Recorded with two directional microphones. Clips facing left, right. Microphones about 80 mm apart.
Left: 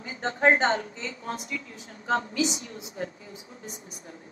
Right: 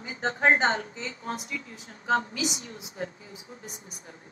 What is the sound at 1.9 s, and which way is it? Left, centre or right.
Speech, right.